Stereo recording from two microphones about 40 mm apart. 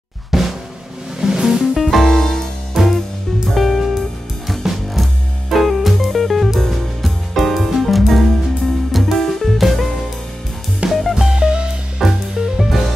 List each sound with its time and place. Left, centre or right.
0.3 s drum: centre
1.2 s music: centre
1.8 s music: centre
2.8 s music: centre
11.2 s music: centre
12.0 s music: centre